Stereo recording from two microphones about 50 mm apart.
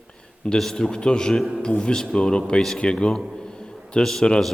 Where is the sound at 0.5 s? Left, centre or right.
Centre.